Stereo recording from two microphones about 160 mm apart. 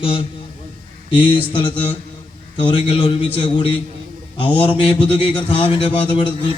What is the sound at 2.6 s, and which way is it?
Speech, 30° left (ahead or behind).